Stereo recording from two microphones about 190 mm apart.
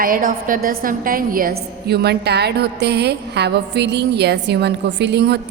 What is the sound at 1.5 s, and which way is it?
A woman's voice, 60° right (ahead or behind).